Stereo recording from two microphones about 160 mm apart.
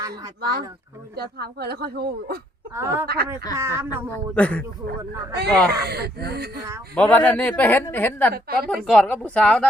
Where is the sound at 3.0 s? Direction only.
75° right (ahead or behind).